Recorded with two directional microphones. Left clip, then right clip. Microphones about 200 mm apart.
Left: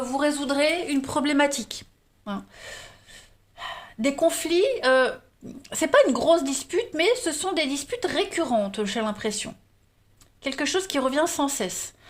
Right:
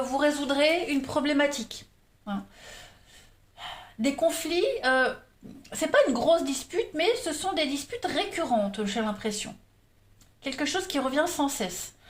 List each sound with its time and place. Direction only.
0.0 s a woman's voice: 25° left (ahead or behind); by 1.8 s 50° left (ahead or behind)
2.2 s gasp: 45° left (ahead or behind)
3.5 s speech: 45° left (ahead or behind)